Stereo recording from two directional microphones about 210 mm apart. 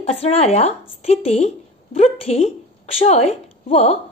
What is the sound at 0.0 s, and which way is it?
A woman's voice, 30° left (ahead or behind).